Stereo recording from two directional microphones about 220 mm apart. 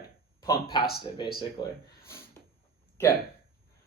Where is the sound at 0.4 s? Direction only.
20° left (ahead or behind).